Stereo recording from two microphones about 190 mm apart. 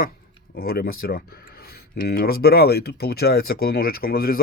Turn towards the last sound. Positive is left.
turn(degrees=50)  # may be behind; listen again after turning